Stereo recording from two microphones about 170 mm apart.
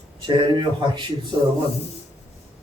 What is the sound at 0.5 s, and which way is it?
Speech, 25° right (ahead or behind).